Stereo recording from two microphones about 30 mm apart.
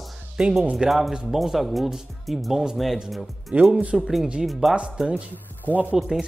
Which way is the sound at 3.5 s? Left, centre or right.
Right.